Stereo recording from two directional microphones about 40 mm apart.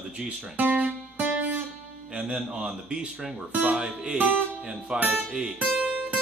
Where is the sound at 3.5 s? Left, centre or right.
Right.